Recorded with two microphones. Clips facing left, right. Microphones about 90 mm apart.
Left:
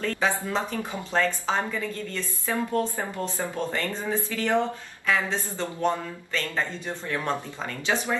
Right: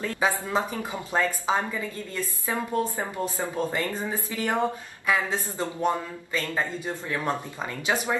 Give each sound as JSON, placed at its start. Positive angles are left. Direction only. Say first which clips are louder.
{"t": 0.0, "sound": "a woman's voice", "louder": "even", "side_deg": -15}